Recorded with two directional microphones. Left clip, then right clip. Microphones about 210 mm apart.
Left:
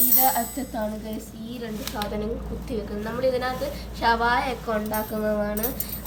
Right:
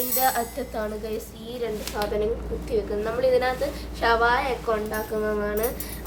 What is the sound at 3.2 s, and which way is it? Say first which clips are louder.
A woman's voice: right 2 dB; 20° right (ahead or behind).